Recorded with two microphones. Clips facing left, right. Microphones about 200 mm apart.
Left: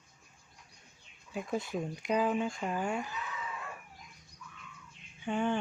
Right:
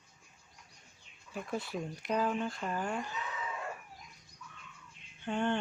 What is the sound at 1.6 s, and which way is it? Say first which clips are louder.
Speech: left 3 dB; 15° left (ahead or behind).